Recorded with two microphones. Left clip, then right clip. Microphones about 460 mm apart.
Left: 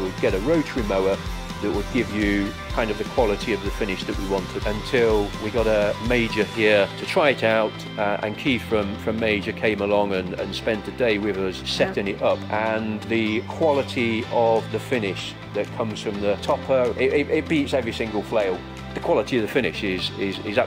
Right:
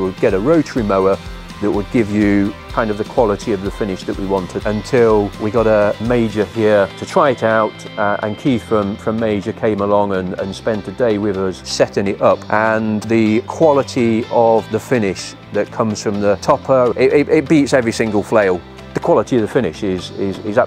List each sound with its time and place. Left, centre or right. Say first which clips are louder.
0.2 s speech: right 8 dB; right
11.7 s speech: right 8 dB; right
19.0 s speech: right 7 dB; right